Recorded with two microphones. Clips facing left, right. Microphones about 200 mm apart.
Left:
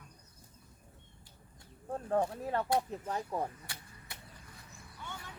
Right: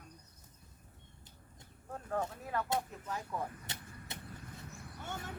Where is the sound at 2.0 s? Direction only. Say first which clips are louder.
Left 6 dB; 30° left (ahead or behind).